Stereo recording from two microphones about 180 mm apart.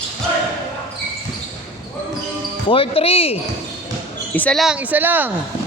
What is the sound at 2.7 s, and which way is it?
Speech, 30° left (ahead or behind).